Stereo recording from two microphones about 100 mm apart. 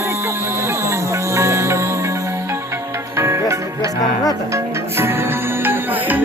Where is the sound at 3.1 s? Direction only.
25° right (ahead or behind).